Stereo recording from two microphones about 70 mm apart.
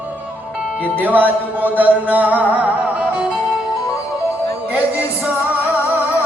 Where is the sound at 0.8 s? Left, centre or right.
Right.